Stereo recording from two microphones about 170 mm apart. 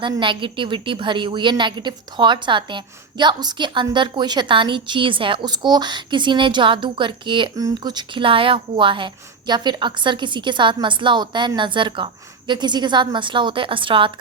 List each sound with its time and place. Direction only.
0.0 s a woman's voice: 30° right (ahead or behind)